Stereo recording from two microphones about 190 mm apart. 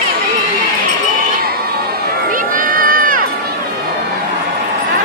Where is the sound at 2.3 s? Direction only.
45° right (ahead or behind).